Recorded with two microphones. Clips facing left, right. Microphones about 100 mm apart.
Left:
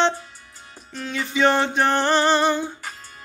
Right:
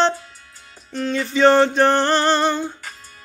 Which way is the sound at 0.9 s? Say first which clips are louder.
Right 5 dB; 5° left (ahead or behind).